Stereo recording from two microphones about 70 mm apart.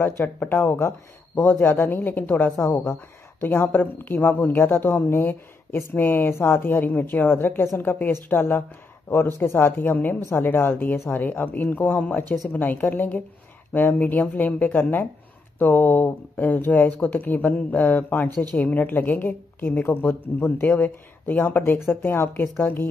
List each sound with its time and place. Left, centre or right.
0.4 s speech: left
2.6 s a woman's voice: left